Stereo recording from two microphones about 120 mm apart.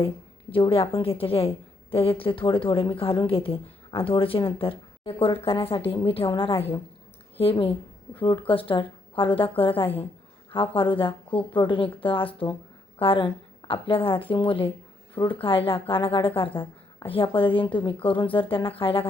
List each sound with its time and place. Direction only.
0.5 s a woman's voice: 50° left (ahead or behind)